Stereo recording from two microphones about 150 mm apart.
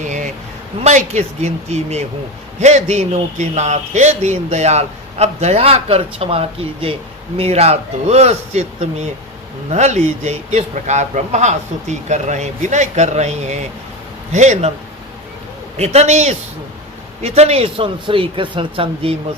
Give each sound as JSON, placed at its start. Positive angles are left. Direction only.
{"t": 0.0, "sound": "a sound", "side_deg": -55}
{"t": 0.8, "sound": "a man's voice", "side_deg": -50}
{"t": 15.8, "sound": "a man's voice", "side_deg": -45}